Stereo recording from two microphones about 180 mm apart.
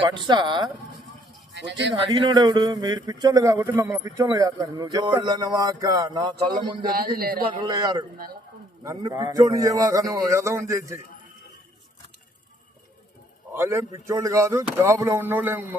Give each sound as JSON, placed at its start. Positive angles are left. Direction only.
{"t": 0.0, "sound": "speech", "side_deg": -25}
{"t": 1.5, "sound": "speech", "side_deg": -75}
{"t": 2.0, "sound": "speech", "side_deg": -25}
{"t": 6.8, "sound": "a man's voice", "side_deg": -55}
{"t": 7.4, "sound": "a man's voice", "side_deg": -25}
{"t": 13.5, "sound": "a man's voice", "side_deg": -15}